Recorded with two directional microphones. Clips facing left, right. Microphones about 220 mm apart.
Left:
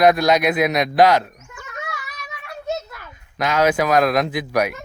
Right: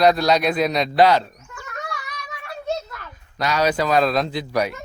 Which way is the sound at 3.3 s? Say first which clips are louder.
Left 2 dB; 15° left (ahead or behind).